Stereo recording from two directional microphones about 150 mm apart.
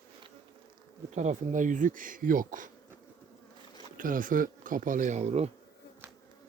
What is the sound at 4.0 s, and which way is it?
Speech, 65° right (ahead or behind).